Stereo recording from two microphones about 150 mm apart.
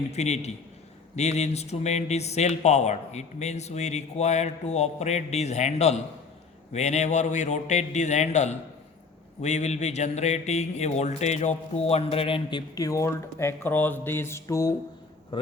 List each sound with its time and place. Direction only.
0.1 s speech: 45° left (ahead or behind); by 14.8 s 20° left (ahead or behind)
15.3 s a man's voice: 35° left (ahead or behind)